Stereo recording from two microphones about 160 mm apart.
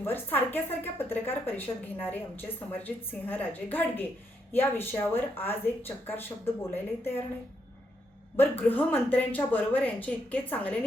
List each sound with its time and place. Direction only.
0.0 s a woman's voice: 15° left (ahead or behind)
8.4 s a woman's voice: 10° left (ahead or behind)